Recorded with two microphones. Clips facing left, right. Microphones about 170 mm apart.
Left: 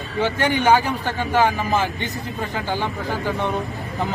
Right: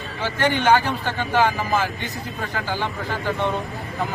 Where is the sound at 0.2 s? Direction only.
15° left (ahead or behind).